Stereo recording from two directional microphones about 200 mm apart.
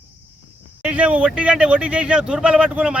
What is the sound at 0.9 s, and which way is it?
Speech, 5° right (ahead or behind).